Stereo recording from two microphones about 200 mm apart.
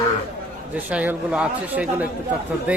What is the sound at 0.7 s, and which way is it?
A man's voice, 5° right (ahead or behind).